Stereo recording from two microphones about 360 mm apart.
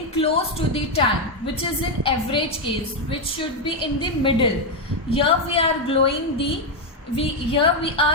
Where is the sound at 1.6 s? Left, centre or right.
Centre.